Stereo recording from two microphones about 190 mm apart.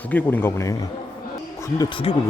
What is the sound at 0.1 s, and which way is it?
Speech, 10° left (ahead or behind).